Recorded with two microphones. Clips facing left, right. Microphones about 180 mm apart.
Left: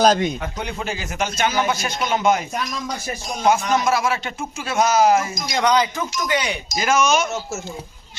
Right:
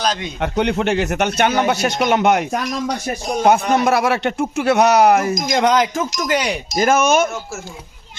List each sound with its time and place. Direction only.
0.0 s a man's voice: 45° left (ahead or behind)
0.3 s a man's voice: 70° right (ahead or behind)
5.2 s speech: 45° right (ahead or behind)
6.8 s speech: 55° right (ahead or behind)